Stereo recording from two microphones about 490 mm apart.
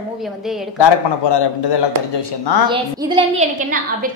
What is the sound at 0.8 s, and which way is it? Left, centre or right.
A man's voice, left.